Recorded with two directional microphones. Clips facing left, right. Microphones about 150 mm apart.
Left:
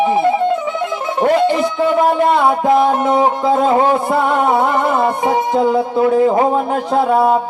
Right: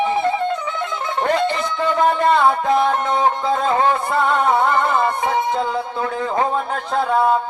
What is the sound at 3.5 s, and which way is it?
Speech, 20° left (ahead or behind).